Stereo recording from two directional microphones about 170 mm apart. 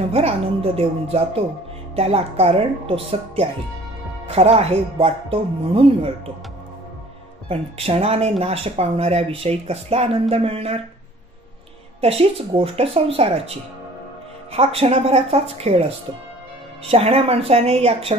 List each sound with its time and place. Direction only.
0.1 s speech: 35° right (ahead or behind)
7.4 s speech: 35° right (ahead or behind)
12.0 s speech: 35° right (ahead or behind)
14.5 s speech: 35° right (ahead or behind)
16.9 s speech: 35° right (ahead or behind)